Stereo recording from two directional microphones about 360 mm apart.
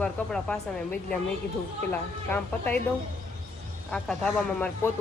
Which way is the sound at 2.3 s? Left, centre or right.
Centre.